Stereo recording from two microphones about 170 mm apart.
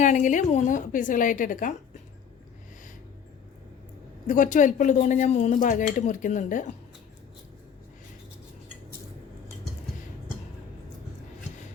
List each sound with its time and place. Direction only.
0.0 s speech: 45° left (ahead or behind)
4.3 s speech: 50° left (ahead or behind)